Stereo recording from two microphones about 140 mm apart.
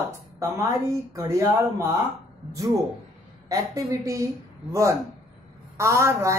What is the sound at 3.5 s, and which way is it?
Speech, 20° right (ahead or behind).